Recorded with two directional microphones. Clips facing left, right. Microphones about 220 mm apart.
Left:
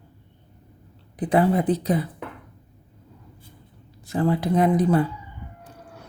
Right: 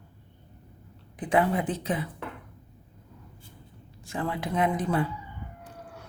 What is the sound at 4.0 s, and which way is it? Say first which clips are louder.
Speech: left 9 dB; 35° left (ahead or behind).